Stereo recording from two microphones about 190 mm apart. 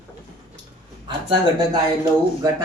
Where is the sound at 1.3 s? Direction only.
20° right (ahead or behind).